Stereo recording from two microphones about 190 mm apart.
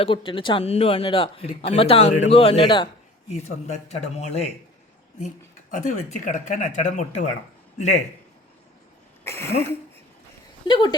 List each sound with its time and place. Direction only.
0.0 s a man's voice: 25° left (ahead or behind)
5.7 s a man's voice: 40° left (ahead or behind)
9.2 s speech: 15° left (ahead or behind)
10.7 s speech: 25° left (ahead or behind)